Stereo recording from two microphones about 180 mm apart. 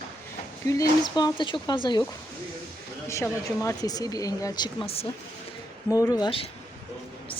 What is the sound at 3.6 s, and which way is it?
Speech, 20° left (ahead or behind).